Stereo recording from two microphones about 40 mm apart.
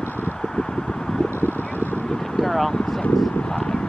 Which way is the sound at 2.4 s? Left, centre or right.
Centre.